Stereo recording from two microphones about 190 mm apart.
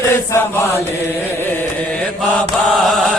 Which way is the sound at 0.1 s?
10° left (ahead or behind).